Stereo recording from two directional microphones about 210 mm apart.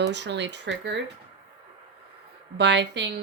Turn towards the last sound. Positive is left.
turn(degrees=-55)  # may be behind; listen again after turning